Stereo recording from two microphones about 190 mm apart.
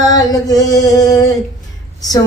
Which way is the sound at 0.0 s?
20° left (ahead or behind).